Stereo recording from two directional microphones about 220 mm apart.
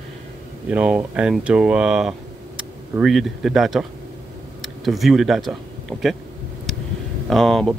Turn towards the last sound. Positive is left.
turn(degrees=0)  # may be behind; listen again after turning